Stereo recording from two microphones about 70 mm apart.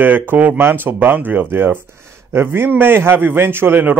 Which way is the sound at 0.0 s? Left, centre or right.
Right.